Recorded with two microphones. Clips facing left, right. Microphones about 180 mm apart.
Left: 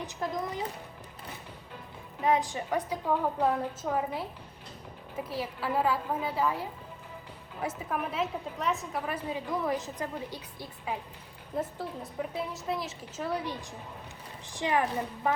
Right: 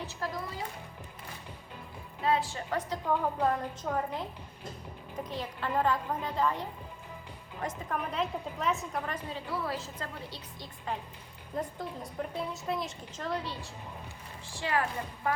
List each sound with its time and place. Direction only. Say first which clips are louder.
0.0 s a woman's voice: left 3 dB; 15° left (ahead or behind)
2.2 s a woman's voice: left 2 dB; 15° left (ahead or behind)